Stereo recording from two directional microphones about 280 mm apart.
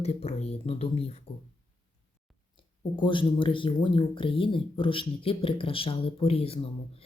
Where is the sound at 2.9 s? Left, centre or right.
Centre.